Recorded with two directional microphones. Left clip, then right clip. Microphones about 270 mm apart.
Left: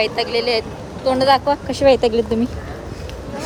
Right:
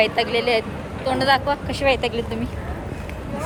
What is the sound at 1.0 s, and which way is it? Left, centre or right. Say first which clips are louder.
Speech: left 4 dB; left.